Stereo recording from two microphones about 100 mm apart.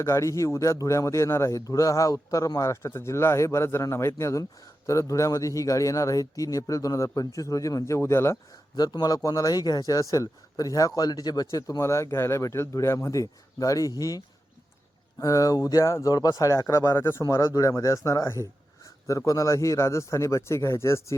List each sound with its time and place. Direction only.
0.0 s a man's voice: 30° left (ahead or behind)
8.7 s a man's voice: 40° left (ahead or behind)
11.6 s a man's voice: 30° left (ahead or behind)
15.2 s a man's voice: 35° left (ahead or behind)